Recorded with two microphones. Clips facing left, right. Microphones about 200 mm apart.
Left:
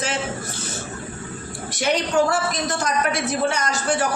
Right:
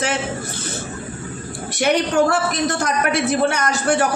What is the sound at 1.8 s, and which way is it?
A man's voice, 60° right (ahead or behind).